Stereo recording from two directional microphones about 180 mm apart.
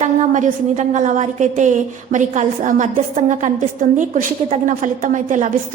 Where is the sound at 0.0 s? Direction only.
40° right (ahead or behind).